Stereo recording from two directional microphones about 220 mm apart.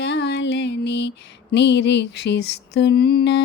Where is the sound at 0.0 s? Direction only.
50° left (ahead or behind).